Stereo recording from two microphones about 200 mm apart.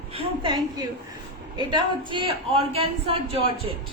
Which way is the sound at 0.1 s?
25° right (ahead or behind).